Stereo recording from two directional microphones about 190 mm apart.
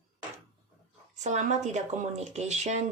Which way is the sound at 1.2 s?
40° right (ahead or behind).